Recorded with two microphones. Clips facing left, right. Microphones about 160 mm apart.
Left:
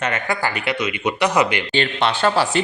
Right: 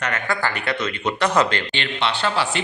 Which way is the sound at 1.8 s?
45° left (ahead or behind).